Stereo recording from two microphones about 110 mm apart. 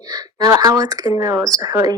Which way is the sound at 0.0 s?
35° right (ahead or behind).